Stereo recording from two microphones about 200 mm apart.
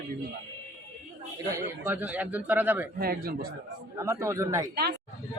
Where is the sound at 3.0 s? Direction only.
50° right (ahead or behind).